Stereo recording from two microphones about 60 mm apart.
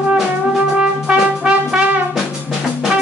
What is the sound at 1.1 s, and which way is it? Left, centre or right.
Music, centre.